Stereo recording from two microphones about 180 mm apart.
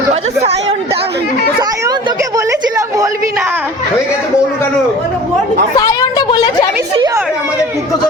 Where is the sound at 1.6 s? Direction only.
20° right (ahead or behind).